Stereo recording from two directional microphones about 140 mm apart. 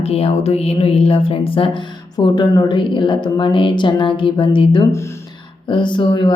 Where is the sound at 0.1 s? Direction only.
45° left (ahead or behind).